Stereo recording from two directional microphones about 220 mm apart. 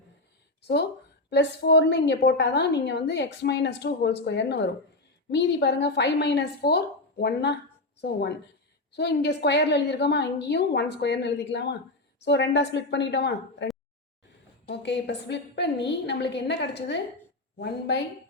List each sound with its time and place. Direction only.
1.3 s a woman's voice: 50° left (ahead or behind)
9.0 s a woman's voice: 50° left (ahead or behind)
14.7 s a woman's voice: 50° left (ahead or behind)